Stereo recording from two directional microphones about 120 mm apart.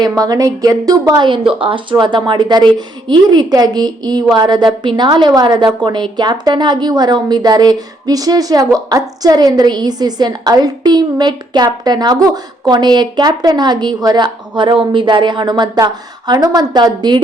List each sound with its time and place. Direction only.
0.0 s a woman's voice: 30° right (ahead or behind)